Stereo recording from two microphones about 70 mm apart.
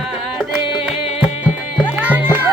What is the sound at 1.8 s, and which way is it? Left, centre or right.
Music, right.